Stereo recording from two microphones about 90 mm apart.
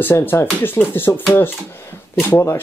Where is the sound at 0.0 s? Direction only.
25° left (ahead or behind).